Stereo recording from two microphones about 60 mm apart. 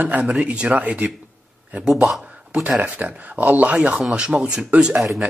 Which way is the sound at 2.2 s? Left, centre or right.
Right.